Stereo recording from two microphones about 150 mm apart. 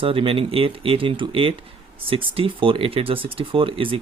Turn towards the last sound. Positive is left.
turn(degrees=-35)  # may be behind; listen again after turning